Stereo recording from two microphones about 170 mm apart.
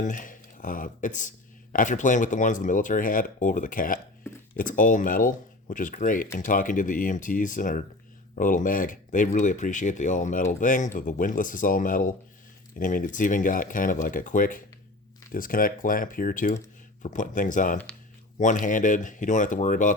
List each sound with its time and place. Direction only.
0.0 s speech: 50° left (ahead or behind)